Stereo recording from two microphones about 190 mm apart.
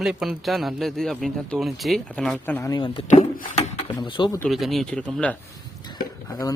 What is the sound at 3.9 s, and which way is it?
Speech, 25° left (ahead or behind).